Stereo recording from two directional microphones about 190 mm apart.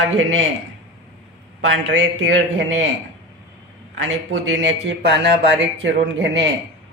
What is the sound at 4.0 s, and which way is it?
Speech, 80° right.